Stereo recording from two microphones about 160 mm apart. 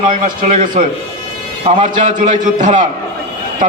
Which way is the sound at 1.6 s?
50° right (ahead or behind).